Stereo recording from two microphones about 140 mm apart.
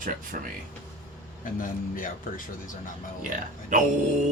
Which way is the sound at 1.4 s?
70° left (ahead or behind).